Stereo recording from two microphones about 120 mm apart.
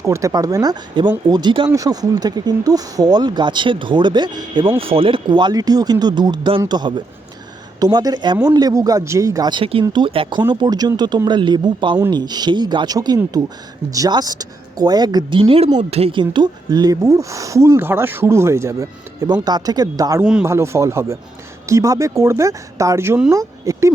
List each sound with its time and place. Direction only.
0.0 s speech: 25° right (ahead or behind)
4.8 s speech: 50° right (ahead or behind)
16.1 s speech: 40° right (ahead or behind)